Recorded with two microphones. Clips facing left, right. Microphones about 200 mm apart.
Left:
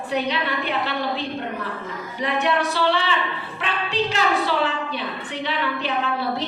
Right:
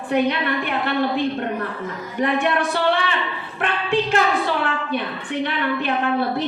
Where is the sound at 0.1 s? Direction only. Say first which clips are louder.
Right 5 dB; 55° right (ahead or behind).